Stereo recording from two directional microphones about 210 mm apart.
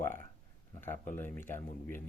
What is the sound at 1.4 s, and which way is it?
Speech, 10° left (ahead or behind).